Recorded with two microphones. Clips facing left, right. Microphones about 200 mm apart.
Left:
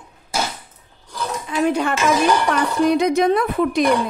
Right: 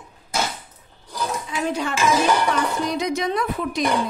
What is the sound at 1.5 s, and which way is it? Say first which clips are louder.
A woman's voice: left 8 dB; 55° left (ahead or behind).